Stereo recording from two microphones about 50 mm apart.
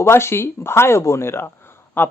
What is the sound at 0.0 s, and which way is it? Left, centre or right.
Speech, left.